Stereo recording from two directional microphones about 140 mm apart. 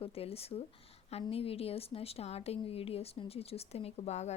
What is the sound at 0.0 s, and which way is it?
Speech, 45° left (ahead or behind).